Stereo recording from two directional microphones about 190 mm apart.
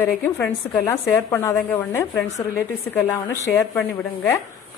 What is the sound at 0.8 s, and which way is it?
Speech, 10° left (ahead or behind).